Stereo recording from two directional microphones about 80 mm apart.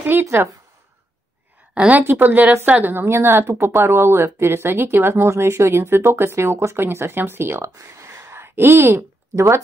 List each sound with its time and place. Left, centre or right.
0.0 s a woman's voice: right
1.7 s a woman's voice: centre; by 9.6 s right